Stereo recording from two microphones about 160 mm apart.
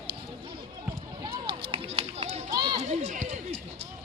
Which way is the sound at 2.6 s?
25° right (ahead or behind).